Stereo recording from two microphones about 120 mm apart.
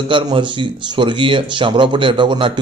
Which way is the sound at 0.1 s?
45° right (ahead or behind).